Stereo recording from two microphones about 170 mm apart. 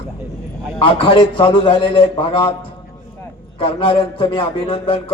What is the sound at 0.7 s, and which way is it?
Speech, 30° left (ahead or behind).